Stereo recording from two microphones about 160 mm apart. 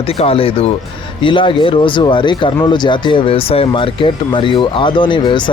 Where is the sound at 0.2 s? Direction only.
35° left (ahead or behind).